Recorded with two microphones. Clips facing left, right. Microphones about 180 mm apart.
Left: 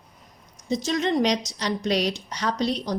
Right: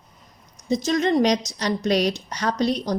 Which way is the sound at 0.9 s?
45° right (ahead or behind).